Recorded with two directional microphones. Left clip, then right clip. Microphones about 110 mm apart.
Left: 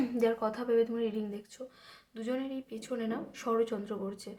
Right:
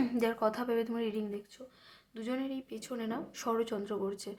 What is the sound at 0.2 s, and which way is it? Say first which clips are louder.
Speech: left 2 dB; 30° right (ahead or behind).